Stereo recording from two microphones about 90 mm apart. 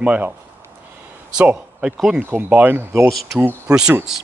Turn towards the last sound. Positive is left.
turn(degrees=-10)  # may be behind; listen again after turning